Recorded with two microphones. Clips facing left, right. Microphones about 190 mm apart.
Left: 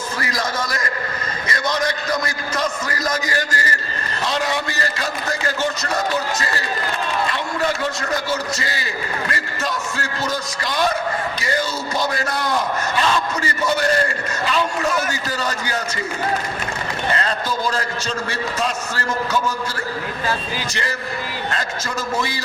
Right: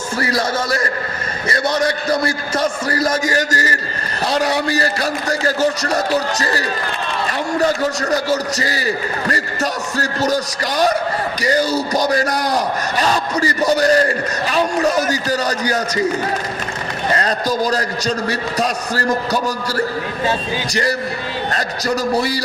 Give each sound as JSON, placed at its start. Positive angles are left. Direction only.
{"t": 0.2, "sound": "a man's voice", "side_deg": -35}
{"t": 17.2, "sound": "a man's voice", "side_deg": -40}
{"t": 21.5, "sound": "speech", "side_deg": -40}